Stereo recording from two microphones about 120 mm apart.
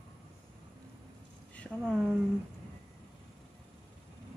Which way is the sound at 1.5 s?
5° left (ahead or behind).